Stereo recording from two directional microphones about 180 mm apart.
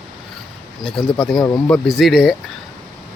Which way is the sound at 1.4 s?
25° left (ahead or behind).